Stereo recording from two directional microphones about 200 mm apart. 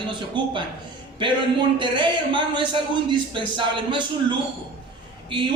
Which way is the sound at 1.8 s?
25° right (ahead or behind).